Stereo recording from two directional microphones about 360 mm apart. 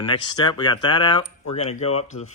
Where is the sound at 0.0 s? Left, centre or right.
Centre.